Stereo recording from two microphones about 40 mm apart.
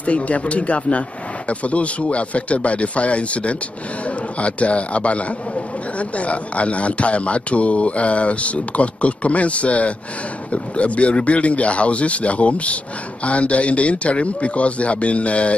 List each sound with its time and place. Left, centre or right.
0.0 s speech: left